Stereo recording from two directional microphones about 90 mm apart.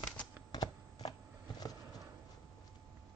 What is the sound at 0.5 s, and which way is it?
Shuffling cards, 50° left (ahead or behind).